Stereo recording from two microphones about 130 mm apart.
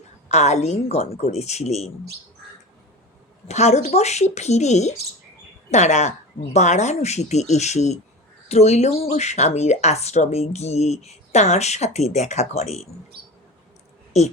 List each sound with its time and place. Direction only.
0.3 s speech: 60° left (ahead or behind)
3.5 s speech: 60° left (ahead or behind)
14.1 s speech: 60° left (ahead or behind)